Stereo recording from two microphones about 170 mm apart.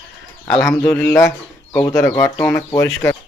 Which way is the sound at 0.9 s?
15° left (ahead or behind).